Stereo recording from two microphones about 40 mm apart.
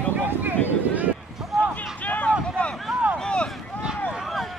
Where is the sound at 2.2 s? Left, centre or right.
Left.